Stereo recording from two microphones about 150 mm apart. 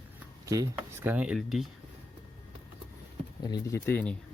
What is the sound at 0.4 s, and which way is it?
Speech, 20° right (ahead or behind).